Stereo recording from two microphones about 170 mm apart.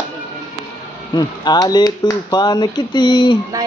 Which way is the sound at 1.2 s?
25° left (ahead or behind).